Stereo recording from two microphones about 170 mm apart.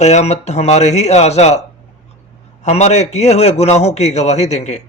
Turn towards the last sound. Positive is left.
turn(degrees=40)  # may be behind; listen again after turning